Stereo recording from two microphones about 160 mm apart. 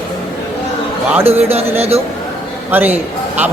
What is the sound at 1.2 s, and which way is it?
Speech, 40° right (ahead or behind).